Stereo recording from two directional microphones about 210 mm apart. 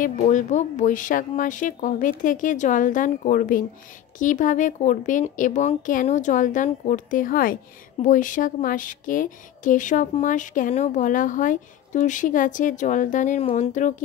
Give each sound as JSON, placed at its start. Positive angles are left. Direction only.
{"t": 0.0, "sound": "speech", "side_deg": 35}